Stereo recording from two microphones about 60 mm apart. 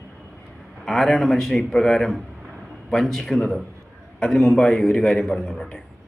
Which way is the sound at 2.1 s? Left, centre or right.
Centre.